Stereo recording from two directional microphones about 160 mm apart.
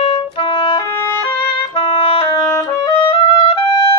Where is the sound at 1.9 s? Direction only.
35° left (ahead or behind).